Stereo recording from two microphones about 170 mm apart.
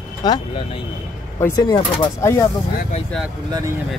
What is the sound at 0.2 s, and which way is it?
Speech, 25° left (ahead or behind).